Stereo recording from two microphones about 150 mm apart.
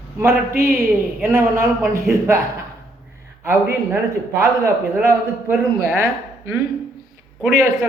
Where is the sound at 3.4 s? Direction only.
15° right (ahead or behind).